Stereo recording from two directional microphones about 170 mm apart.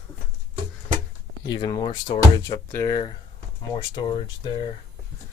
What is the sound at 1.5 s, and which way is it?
Speech, 25° left (ahead or behind).